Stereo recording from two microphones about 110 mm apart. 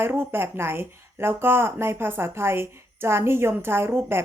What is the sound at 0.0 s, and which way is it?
Speech, 20° right (ahead or behind).